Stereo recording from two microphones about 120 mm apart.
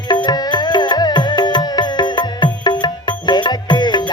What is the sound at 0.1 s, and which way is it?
Music, 35° left (ahead or behind).